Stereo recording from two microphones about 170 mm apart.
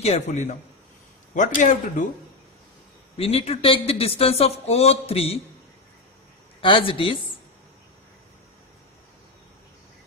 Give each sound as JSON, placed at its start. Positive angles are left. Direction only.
{"t": 0.0, "sound": "a man's voice", "side_deg": 40}
{"t": 3.2, "sound": "speech", "side_deg": 35}
{"t": 6.6, "sound": "speech", "side_deg": 30}